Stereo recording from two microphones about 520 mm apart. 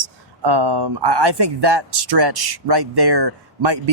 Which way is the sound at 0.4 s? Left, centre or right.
Right.